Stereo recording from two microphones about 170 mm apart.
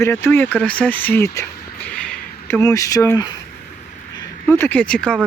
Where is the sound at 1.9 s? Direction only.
5° left (ahead or behind).